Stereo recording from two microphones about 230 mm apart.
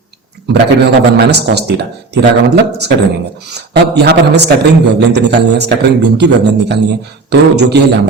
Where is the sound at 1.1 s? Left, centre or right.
Right.